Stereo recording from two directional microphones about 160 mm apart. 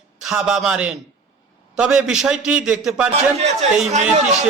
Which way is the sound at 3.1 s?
40° right (ahead or behind).